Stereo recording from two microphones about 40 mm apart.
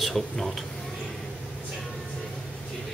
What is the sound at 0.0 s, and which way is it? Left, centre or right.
Speech, centre.